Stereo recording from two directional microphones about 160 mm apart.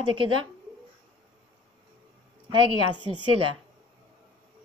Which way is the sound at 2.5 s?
30° right (ahead or behind).